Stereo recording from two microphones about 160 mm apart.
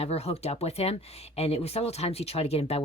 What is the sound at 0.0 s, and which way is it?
Speech, 40° left (ahead or behind).